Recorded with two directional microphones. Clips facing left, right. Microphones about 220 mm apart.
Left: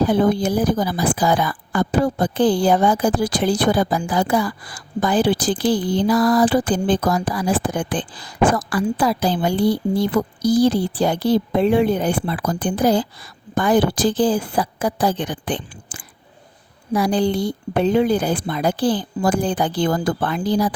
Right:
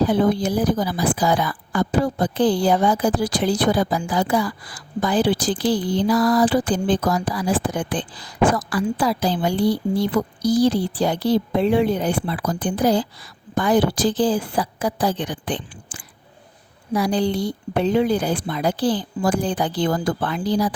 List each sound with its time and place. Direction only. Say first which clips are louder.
0.0 s speech: left 1 dB; 50° left (ahead or behind)